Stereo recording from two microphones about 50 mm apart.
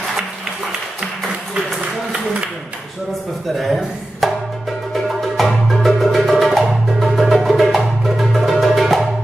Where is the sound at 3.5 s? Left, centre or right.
Centre.